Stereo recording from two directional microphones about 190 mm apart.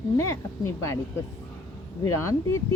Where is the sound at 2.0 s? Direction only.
15° left (ahead or behind).